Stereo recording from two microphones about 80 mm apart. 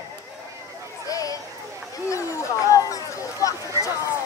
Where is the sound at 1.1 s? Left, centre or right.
Left.